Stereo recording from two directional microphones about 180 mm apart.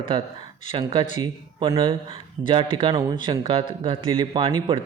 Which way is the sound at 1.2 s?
30° right (ahead or behind).